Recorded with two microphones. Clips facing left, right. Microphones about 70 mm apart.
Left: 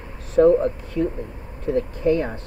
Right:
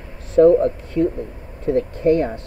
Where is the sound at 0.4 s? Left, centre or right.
Left.